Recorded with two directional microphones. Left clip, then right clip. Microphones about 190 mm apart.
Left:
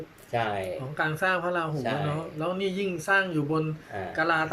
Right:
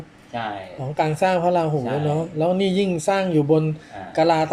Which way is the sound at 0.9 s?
25° right (ahead or behind).